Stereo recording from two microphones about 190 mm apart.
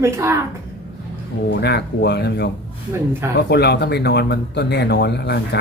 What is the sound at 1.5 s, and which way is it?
Speech, 60° left (ahead or behind).